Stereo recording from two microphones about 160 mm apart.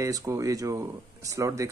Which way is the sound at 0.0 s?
20° right (ahead or behind).